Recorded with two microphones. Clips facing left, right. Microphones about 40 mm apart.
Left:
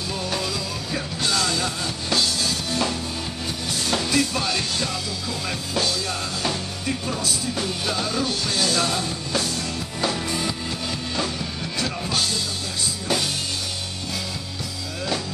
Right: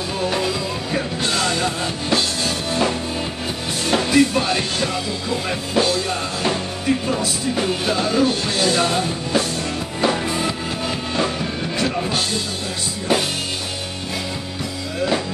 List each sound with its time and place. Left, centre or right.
0.2 s music: right